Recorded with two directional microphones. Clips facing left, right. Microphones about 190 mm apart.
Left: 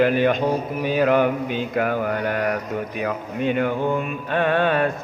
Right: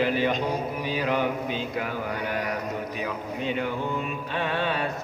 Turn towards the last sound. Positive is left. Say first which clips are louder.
# left 8 dB
turn(degrees=55)  # may be behind; listen again after turning